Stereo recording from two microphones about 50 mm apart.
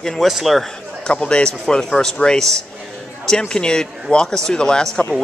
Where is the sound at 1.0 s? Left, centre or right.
Centre.